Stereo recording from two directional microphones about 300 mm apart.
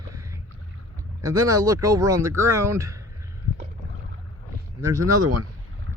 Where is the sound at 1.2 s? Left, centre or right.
Centre.